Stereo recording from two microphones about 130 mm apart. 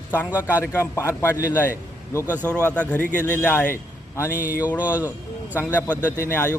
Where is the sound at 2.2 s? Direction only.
15° right (ahead or behind).